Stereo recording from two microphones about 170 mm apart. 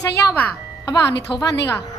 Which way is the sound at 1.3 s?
25° left (ahead or behind).